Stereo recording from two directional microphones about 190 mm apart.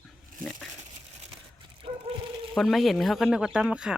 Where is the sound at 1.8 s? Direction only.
30° right (ahead or behind).